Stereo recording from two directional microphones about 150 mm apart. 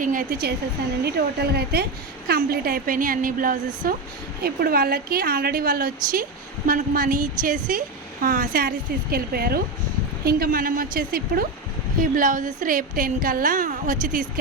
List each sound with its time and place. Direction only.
0.0 s a woman's voice: 65° right (ahead or behind)
1.0 s a woman's voice: 90° right; by 3.9 s 65° right (ahead or behind)
4.4 s a woman's voice: 90° right; by 11.4 s 75° right (ahead or behind)
11.9 s a woman's voice: 65° right (ahead or behind)